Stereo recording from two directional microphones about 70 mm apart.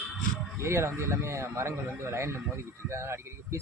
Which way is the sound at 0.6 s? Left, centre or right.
Right.